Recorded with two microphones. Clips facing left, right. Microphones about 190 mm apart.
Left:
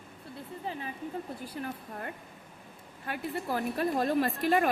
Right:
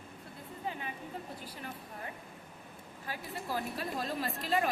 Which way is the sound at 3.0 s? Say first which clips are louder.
Left 7 dB; 60° left (ahead or behind).